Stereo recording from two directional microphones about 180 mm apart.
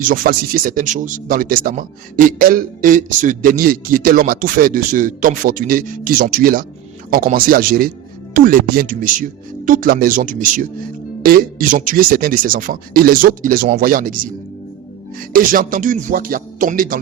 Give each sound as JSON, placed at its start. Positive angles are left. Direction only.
{"t": 0.1, "sound": "speech", "side_deg": -50}
{"t": 15.2, "sound": "speech", "side_deg": -50}